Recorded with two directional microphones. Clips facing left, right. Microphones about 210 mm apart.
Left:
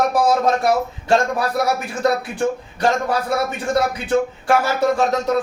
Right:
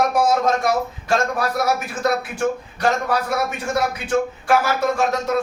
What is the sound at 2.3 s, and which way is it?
Speech, 30° left (ahead or behind).